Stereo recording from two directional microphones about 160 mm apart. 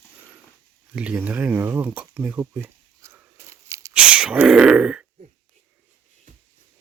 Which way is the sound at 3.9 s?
5° right (ahead or behind).